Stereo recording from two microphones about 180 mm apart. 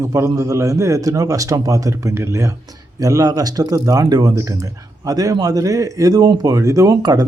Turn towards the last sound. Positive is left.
turn(degrees=-20)  # may be behind; listen again after turning